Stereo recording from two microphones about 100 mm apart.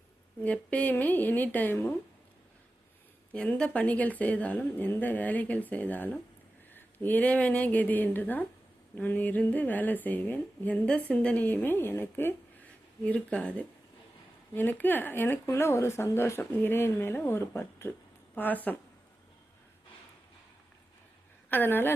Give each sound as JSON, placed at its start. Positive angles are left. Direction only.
{"t": 0.4, "sound": "a woman's voice", "side_deg": 15}
{"t": 3.5, "sound": "a woman's voice", "side_deg": 10}
{"t": 21.5, "sound": "speech", "side_deg": 20}